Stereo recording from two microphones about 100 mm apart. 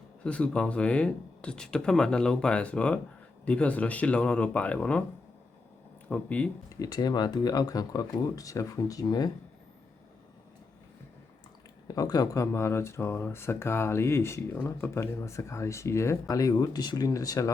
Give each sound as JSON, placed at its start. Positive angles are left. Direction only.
{"t": 0.3, "sound": "speech", "side_deg": 10}
{"t": 6.1, "sound": "speech", "side_deg": 15}
{"t": 6.7, "sound": "speech", "side_deg": 35}
{"t": 11.9, "sound": "speech", "side_deg": 40}